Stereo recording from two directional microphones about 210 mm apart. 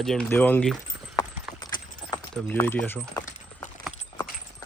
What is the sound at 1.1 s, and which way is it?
Clip-clop, 20° left (ahead or behind).